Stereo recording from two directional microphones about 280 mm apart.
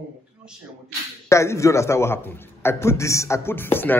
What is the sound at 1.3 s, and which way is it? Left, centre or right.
A man's voice, centre.